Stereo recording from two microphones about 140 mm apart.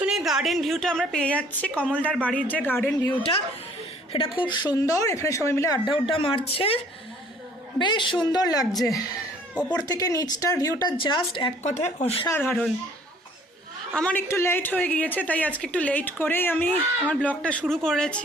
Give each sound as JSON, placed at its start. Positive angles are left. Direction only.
{"t": 0.0, "sound": "speech", "side_deg": -5}
{"t": 4.1, "sound": "speech", "side_deg": 40}
{"t": 7.8, "sound": "speech", "side_deg": 35}
{"t": 11.6, "sound": "speech", "side_deg": 55}
{"t": 12.3, "sound": "speech", "side_deg": 15}
{"t": 13.9, "sound": "speech", "side_deg": 10}